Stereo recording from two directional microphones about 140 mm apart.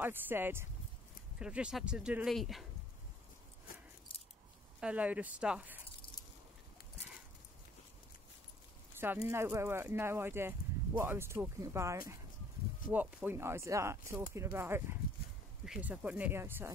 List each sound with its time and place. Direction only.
0.0 s speech: 15° right (ahead or behind)
4.7 s speech: 10° right (ahead or behind)
9.0 s speech: 15° right (ahead or behind)